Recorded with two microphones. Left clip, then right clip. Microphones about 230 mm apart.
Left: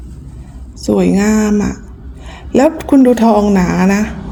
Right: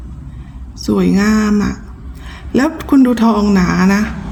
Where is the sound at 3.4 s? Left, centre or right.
Right.